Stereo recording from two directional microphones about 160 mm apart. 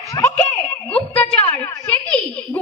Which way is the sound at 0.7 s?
35° left (ahead or behind).